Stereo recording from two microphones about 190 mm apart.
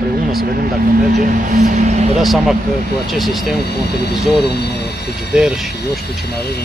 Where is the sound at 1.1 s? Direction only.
40° right (ahead or behind).